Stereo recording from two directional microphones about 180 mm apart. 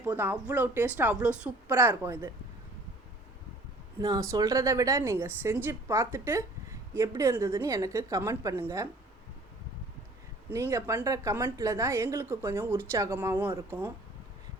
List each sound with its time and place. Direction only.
0.0 s a woman's voice: 10° right (ahead or behind)
4.0 s a woman's voice: 20° right (ahead or behind)
10.5 s a woman's voice: 15° right (ahead or behind)